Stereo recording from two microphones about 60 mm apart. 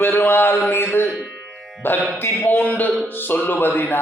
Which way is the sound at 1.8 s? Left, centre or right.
Left.